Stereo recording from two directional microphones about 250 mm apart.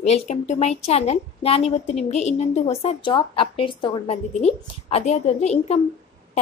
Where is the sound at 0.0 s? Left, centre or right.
Left.